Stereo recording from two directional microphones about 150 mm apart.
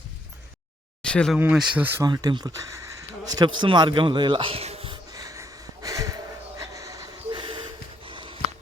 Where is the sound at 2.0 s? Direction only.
25° right (ahead or behind).